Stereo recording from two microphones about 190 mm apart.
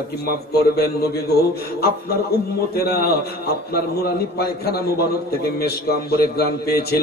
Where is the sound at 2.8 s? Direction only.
55° left (ahead or behind).